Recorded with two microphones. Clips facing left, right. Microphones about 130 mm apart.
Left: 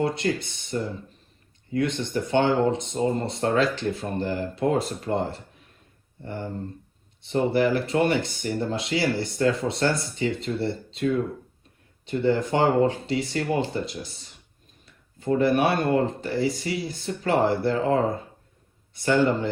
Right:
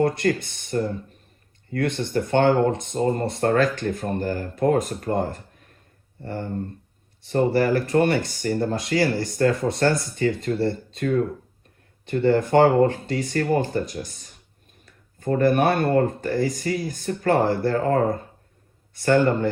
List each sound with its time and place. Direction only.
0.0 s speech: 50° right (ahead or behind)
6.2 s a sound: 55° right (ahead or behind)
7.3 s speech: 50° right (ahead or behind)
12.0 s speech: 55° right (ahead or behind)
15.4 s speech: 50° right (ahead or behind)